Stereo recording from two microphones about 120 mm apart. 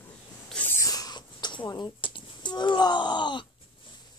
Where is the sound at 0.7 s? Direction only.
30° left (ahead or behind).